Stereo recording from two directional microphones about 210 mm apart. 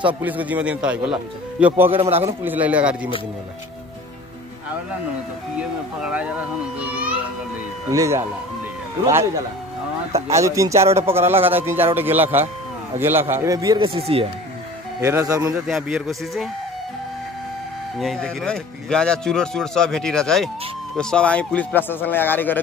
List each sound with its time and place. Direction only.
0.0 s a man's voice: 10° right (ahead or behind)
1.9 s a man's voice: 30° right (ahead or behind)
2.4 s a man's voice: 10° right (ahead or behind)
5.6 s speech: 5° right (ahead or behind)
6.8 s children playing: 5° right (ahead or behind)
7.9 s a man's voice: 15° right (ahead or behind)
10.3 s a man's voice: 15° right (ahead or behind)
15.0 s a man's voice: 15° right (ahead or behind)
15.6 s speech: centre (ahead or behind)
17.9 s a man's voice: centre (ahead or behind)